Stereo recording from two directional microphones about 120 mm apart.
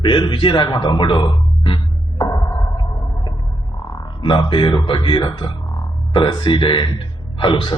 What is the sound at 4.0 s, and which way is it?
A man's voice, 45° left (ahead or behind).